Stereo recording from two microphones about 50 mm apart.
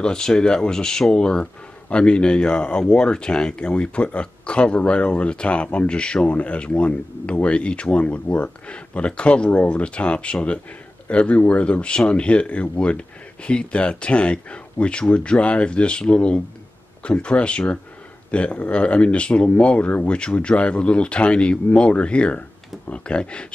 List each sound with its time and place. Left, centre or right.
0.0 s speech: centre